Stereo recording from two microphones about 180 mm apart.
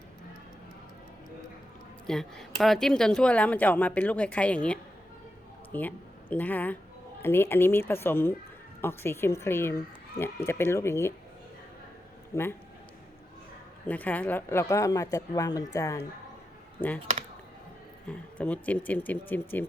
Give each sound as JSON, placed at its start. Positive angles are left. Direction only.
{"t": 2.0, "sound": "speech", "side_deg": 0}
{"t": 12.3, "sound": "speech", "side_deg": 15}
{"t": 13.8, "sound": "speech", "side_deg": 10}
{"t": 18.3, "sound": "speech", "side_deg": 10}